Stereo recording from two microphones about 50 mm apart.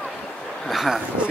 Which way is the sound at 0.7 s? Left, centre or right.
Centre.